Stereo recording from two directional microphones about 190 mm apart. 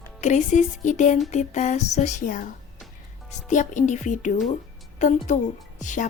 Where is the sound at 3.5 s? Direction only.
40° left (ahead or behind).